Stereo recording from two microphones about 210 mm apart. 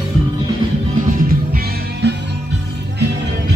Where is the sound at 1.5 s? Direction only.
50° right (ahead or behind).